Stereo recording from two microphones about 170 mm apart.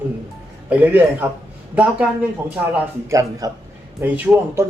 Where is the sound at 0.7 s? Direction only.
10° right (ahead or behind).